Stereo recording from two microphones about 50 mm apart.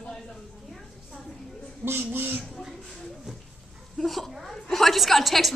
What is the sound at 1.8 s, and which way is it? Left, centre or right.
Speech, right.